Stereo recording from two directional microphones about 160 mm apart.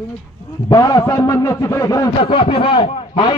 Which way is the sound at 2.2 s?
35° left (ahead or behind).